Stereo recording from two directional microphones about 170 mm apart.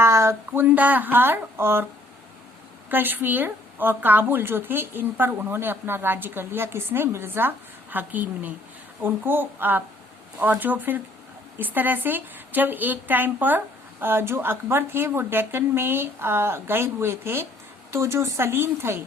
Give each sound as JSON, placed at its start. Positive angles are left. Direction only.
{"t": 0.0, "sound": "a woman's voice", "side_deg": -15}
{"t": 2.9, "sound": "a woman's voice", "side_deg": -10}